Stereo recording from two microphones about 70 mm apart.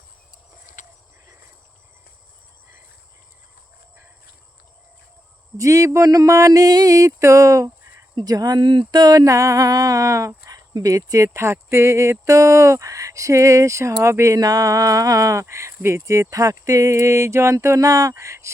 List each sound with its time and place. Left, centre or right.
5.5 s speech: right
8.1 s speech: right
14.3 s speech: right